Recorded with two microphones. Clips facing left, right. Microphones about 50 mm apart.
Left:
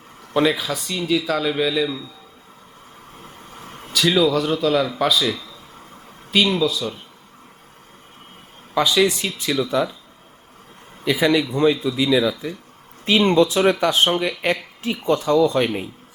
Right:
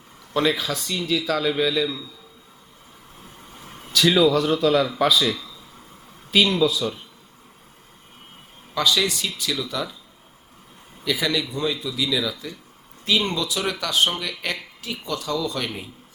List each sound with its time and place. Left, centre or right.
0.3 s speech: centre
3.5 s a sound: left
3.9 s speech: centre
8.7 s speech: centre
11.0 s speech: left
13.1 s speech: left